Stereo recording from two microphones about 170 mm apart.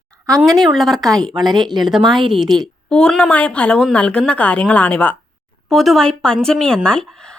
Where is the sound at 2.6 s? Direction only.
5° left (ahead or behind).